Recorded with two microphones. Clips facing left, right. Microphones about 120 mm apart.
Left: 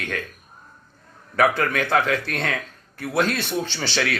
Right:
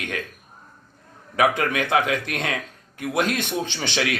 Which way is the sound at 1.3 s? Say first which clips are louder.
Left 1 dB; 10° right (ahead or behind).